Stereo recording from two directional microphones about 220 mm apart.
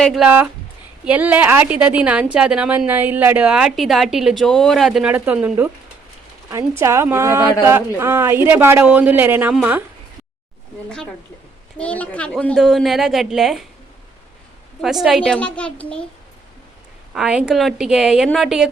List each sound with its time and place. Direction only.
0.0 s a woman's voice: centre (ahead or behind)
10.8 s a woman's voice: 5° left (ahead or behind)
14.8 s a woman's voice: centre (ahead or behind)
17.2 s a woman's voice: 5° right (ahead or behind)